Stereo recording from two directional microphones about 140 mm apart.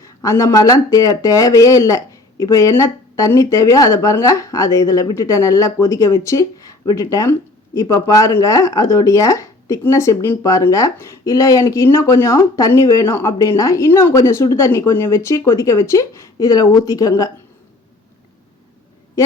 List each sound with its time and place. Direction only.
0.0 s speech: 25° left (ahead or behind)